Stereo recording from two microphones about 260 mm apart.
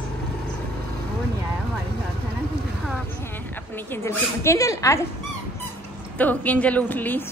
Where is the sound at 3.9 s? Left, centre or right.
Centre.